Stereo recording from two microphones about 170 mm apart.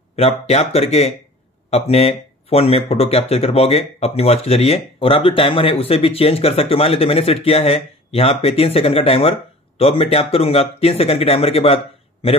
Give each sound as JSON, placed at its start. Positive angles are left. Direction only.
{"t": 0.1, "sound": "speech", "side_deg": 40}